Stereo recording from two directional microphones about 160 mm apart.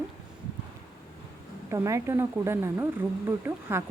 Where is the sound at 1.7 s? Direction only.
15° right (ahead or behind).